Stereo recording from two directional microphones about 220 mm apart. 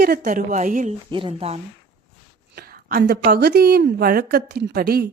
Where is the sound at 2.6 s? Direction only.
40° right (ahead or behind).